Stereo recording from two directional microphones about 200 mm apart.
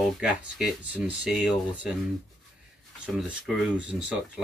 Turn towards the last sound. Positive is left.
turn(degrees=-5)  # may be behind; listen again after turning